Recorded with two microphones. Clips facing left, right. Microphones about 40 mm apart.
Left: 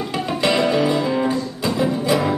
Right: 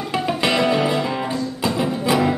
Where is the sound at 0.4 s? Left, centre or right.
Centre.